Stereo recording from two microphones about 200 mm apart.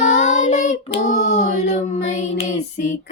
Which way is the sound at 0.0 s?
40° left (ahead or behind).